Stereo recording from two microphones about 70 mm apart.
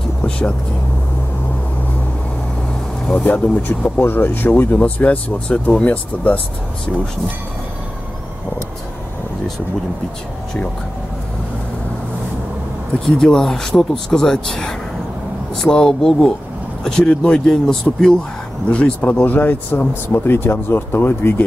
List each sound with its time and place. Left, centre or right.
0.2 s vehicle: centre
3.2 s speech: left
13.0 s speech: centre
17.5 s speech: centre
18.7 s speech: centre